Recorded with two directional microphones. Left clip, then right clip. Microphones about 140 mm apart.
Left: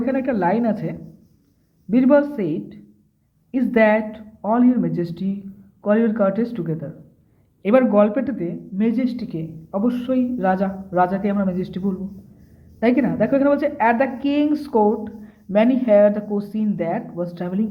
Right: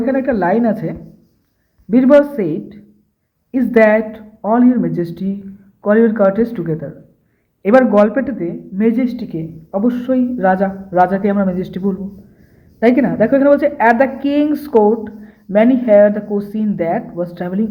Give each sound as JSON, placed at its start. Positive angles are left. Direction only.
{"t": 0.0, "sound": "a woman's voice", "side_deg": -20}